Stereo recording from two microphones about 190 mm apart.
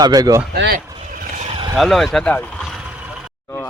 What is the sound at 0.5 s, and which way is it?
Speech, 65° right (ahead or behind).